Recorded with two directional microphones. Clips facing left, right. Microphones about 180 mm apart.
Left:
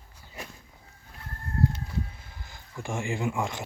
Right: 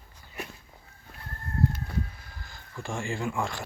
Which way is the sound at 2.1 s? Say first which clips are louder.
Even; 20° left (ahead or behind).